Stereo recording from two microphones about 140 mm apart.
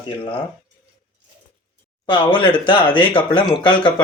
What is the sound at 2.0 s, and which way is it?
Speech, 35° left (ahead or behind).